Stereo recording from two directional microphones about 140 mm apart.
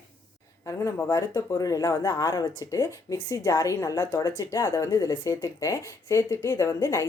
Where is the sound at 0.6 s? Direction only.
20° left (ahead or behind).